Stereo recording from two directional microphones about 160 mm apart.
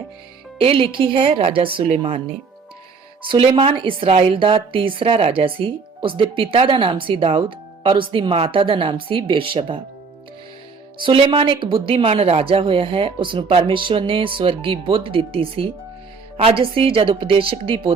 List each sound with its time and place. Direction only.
0.6 s speech: 35° right (ahead or behind)
3.2 s speech: 35° right (ahead or behind)
11.0 s speech: 30° right (ahead or behind)